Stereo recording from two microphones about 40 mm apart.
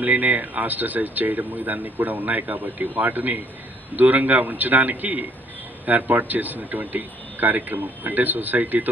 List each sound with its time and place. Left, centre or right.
0.0 s speech: right